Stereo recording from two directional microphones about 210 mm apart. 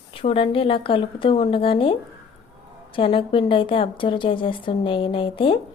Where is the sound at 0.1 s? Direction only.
25° left (ahead or behind).